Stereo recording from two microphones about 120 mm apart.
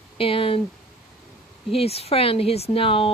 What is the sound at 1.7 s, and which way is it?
Speech, 55° left (ahead or behind).